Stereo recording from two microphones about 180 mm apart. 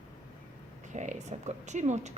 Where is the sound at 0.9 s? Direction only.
40° right (ahead or behind).